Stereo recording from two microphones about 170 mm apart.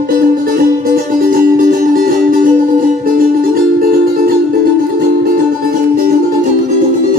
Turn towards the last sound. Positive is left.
turn(degrees=-50)  # may be behind; listen again after turning